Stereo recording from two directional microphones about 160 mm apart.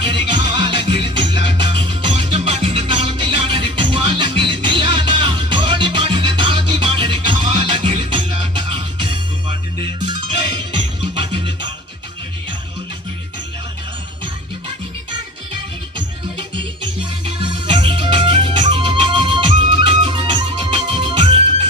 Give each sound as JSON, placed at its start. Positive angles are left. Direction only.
{"t": 0.0, "sound": "music", "side_deg": -30}
{"t": 16.6, "sound": "music", "side_deg": -30}